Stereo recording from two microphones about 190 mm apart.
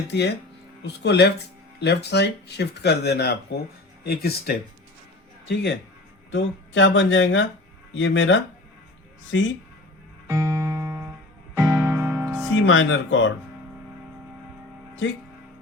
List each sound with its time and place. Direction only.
0.1 s speech: 65° left (ahead or behind)
6.3 s speech: 80° left
10.2 s music: 15° right (ahead or behind)
12.6 s speech: 90° left